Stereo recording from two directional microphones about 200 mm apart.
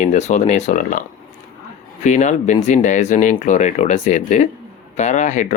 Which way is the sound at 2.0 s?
35° left (ahead or behind).